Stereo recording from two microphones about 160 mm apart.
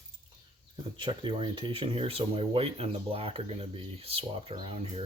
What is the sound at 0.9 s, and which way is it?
Speech, 30° right (ahead or behind).